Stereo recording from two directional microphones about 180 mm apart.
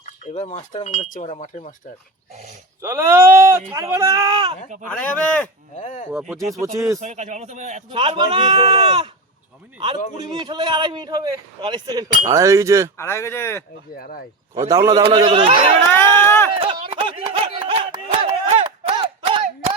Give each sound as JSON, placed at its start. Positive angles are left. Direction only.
{"t": 0.0, "sound": "speech", "side_deg": 40}
{"t": 2.8, "sound": "a man's voice", "side_deg": -15}
{"t": 4.9, "sound": "speech", "side_deg": 10}
{"t": 5.7, "sound": "speech", "side_deg": 40}
{"t": 6.5, "sound": "speech", "side_deg": -15}
{"t": 7.0, "sound": "a man's voice", "side_deg": -40}
{"t": 7.9, "sound": "a man's voice", "side_deg": -30}
{"t": 10.2, "sound": "a man's voice", "side_deg": -25}
{"t": 13.0, "sound": "speech", "side_deg": 15}
{"t": 13.9, "sound": "speech", "side_deg": 55}
{"t": 14.7, "sound": "a man's voice", "side_deg": -20}
{"t": 16.0, "sound": "run", "side_deg": 10}
{"t": 16.6, "sound": "a sound", "side_deg": -30}